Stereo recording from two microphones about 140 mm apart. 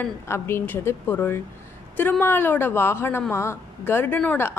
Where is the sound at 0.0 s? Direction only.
15° left (ahead or behind).